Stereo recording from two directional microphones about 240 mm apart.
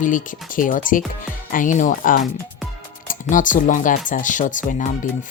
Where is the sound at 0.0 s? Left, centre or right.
Left.